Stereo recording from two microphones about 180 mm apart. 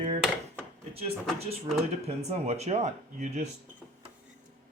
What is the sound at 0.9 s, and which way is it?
Speech, 35° right (ahead or behind).